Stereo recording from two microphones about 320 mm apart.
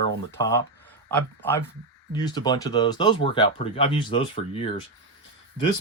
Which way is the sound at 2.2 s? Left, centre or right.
Centre.